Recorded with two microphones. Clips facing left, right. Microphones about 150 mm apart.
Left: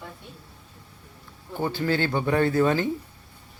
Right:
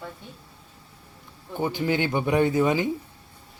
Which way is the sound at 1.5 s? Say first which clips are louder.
Even; 20° right (ahead or behind).